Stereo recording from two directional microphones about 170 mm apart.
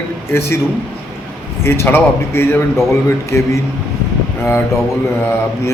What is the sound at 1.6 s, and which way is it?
A man's voice, 15° left (ahead or behind).